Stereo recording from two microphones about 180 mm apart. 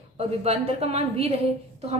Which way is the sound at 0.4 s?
35° right (ahead or behind).